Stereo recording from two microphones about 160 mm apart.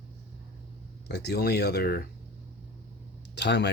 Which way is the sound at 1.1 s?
90° left.